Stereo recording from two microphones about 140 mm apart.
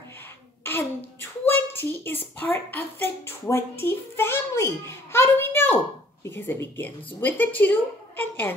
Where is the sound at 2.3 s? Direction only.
15° left (ahead or behind).